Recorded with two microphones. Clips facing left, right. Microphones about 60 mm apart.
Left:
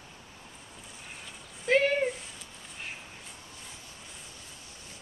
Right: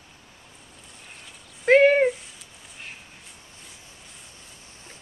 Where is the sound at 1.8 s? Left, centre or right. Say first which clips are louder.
Right 9 dB; right.